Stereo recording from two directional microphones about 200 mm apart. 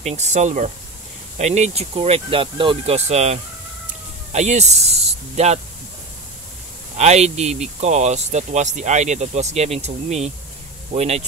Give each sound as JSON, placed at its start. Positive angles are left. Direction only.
{"t": 0.0, "sound": "speech", "side_deg": -35}
{"t": 7.0, "sound": "speech", "side_deg": -35}